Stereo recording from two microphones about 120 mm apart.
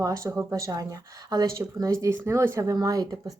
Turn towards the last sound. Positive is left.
turn(degrees=-30)  # may be behind; listen again after turning